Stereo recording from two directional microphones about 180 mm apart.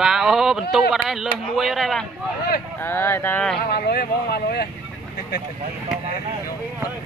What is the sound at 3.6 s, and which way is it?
Speech, 60° left (ahead or behind).